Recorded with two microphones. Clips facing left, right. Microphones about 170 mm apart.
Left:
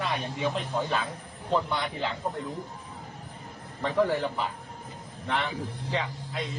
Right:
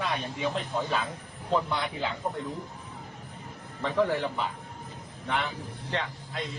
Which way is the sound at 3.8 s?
Centre (ahead or behind).